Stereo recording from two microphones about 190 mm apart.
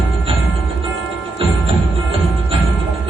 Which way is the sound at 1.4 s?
30° right (ahead or behind).